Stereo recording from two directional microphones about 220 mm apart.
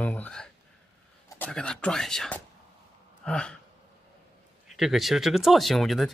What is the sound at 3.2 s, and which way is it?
Gasp, 5° left (ahead or behind).